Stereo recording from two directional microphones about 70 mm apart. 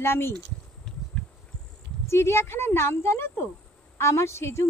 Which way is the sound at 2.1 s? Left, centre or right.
Left.